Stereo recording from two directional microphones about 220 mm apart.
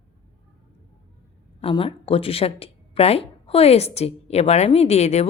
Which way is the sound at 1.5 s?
25° left (ahead or behind).